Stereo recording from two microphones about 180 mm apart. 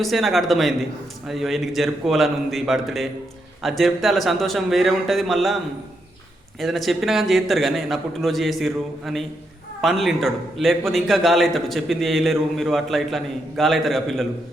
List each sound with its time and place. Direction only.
0.0 s a man's voice: centre (ahead or behind)
6.6 s a man's voice: centre (ahead or behind)